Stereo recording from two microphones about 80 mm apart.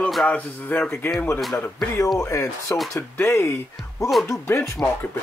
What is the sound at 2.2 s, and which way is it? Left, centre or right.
Speech, left.